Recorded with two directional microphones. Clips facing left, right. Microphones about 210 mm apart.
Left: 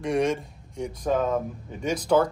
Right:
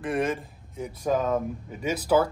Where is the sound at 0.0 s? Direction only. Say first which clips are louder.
Left 3 dB; centre (ahead or behind).